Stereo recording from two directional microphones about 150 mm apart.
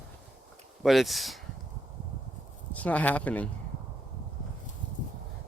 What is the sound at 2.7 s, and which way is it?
Speech, 10° left (ahead or behind).